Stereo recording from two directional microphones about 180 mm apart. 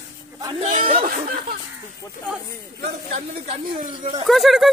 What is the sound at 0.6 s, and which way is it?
Speech, 45° right (ahead or behind).